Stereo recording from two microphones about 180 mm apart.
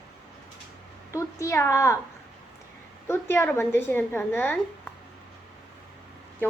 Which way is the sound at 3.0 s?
15° left (ahead or behind).